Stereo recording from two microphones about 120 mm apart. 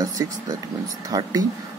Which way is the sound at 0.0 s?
30° right (ahead or behind).